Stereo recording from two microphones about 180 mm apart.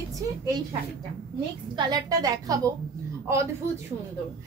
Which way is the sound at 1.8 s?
20° right (ahead or behind).